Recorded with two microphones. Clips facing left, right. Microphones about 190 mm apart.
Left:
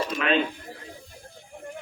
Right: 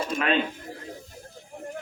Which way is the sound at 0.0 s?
45° right (ahead or behind).